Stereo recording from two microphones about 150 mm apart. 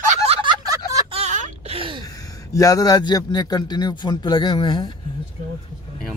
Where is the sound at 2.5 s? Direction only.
20° left (ahead or behind).